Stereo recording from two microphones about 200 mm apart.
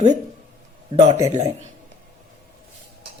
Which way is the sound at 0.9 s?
35° right (ahead or behind).